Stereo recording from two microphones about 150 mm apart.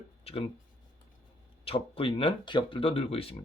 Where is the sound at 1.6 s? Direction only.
40° left (ahead or behind).